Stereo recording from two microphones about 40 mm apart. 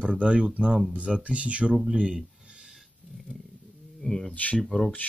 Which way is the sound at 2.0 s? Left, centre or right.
Right.